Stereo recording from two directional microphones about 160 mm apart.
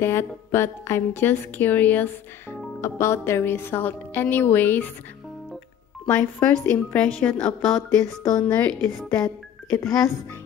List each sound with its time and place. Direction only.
0.0 s a woman's voice: 15° left (ahead or behind)
6.0 s a woman's voice: 15° left (ahead or behind)
8.6 s speech: 5° left (ahead or behind)
9.2 s speech: 20° left (ahead or behind)